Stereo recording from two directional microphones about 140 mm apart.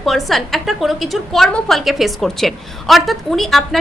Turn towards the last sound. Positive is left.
turn(degrees=0)  # may be behind; listen again after turning